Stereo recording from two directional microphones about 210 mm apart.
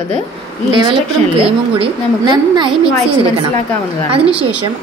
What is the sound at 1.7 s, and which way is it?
Speech, 20° right (ahead or behind).